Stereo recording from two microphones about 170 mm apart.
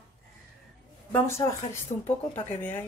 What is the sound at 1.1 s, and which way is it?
A woman's voice, 15° left (ahead or behind).